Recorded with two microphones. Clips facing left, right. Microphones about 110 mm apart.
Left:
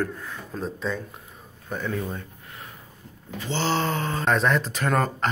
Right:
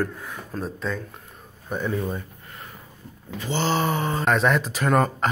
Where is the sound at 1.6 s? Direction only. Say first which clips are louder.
Right 3 dB; 15° right (ahead or behind).